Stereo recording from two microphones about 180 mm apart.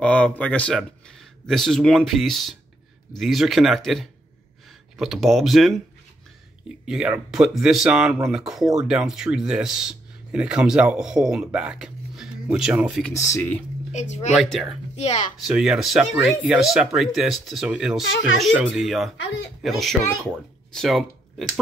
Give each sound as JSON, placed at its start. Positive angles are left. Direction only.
{"t": 0.0, "sound": "speech", "side_deg": 5}
{"t": 6.9, "sound": "speech", "side_deg": -5}
{"t": 13.1, "sound": "speech", "side_deg": 15}
{"t": 13.9, "sound": "a woman's voice", "side_deg": 40}
{"t": 14.3, "sound": "speech", "side_deg": 0}